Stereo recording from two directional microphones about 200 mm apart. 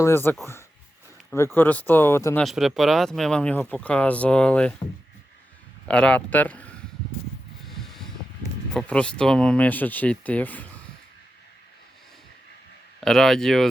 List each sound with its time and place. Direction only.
0.0 s speech: 10° left (ahead or behind)
1.5 s speech: 10° left (ahead or behind)
2.4 s speech: centre (ahead or behind)
5.9 s speech: 5° left (ahead or behind)
7.6 s a sound: centre (ahead or behind)
8.7 s speech: 5° left (ahead or behind)
13.0 s speech: centre (ahead or behind)